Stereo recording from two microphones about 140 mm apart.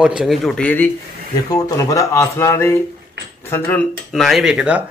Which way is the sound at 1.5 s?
25° left (ahead or behind).